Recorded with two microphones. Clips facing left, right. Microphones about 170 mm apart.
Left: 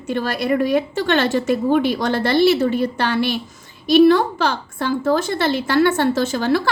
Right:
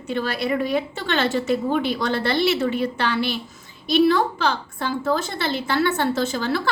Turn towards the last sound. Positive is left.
turn(degrees=50)  # may be behind; listen again after turning